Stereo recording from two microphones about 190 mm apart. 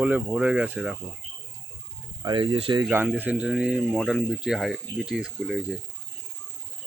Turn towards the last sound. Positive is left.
turn(degrees=0)  # may be behind; listen again after turning